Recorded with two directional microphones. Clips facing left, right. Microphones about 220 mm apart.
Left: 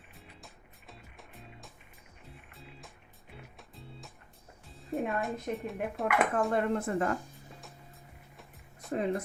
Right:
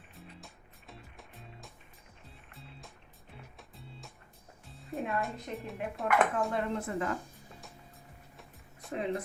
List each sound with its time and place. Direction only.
0.2 s music: centre (ahead or behind)
4.7 s speech: centre (ahead or behind)
6.5 s speech: 50° left (ahead or behind)
8.9 s speech: 45° left (ahead or behind)